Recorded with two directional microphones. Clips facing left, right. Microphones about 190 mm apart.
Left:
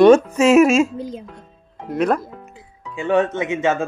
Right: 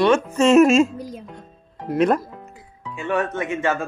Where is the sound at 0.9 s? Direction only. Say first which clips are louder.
Left 4 dB; 25° left (ahead or behind).